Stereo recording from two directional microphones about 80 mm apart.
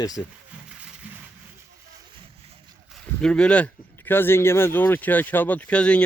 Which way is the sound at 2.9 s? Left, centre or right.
Centre.